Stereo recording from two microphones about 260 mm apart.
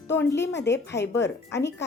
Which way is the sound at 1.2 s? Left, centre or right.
Left.